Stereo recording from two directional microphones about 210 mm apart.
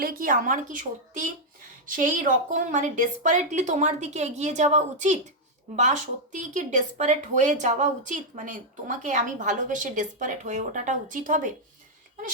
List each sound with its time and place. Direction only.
0.0 s speech: 45° right (ahead or behind)